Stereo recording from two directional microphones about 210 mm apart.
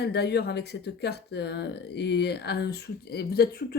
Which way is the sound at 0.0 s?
50° left (ahead or behind).